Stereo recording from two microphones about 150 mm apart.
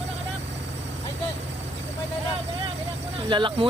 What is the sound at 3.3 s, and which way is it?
Speech, 30° right (ahead or behind).